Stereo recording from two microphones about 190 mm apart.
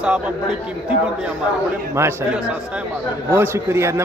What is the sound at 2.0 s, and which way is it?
Speech, 15° right (ahead or behind).